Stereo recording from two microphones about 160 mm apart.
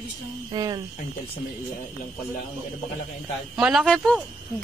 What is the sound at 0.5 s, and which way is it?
Speech, 25° right (ahead or behind).